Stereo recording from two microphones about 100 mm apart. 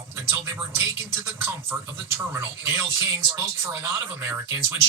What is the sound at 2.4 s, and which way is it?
Speech, 25° right (ahead or behind).